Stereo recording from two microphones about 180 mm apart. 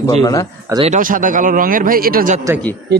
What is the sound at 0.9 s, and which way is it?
Speech, 50° right (ahead or behind).